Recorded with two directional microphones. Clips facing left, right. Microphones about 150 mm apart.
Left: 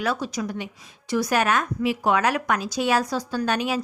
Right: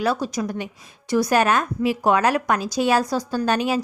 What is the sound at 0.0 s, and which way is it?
A woman's voice, 35° right (ahead or behind).